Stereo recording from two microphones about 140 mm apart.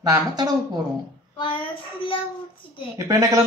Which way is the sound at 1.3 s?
40° left (ahead or behind).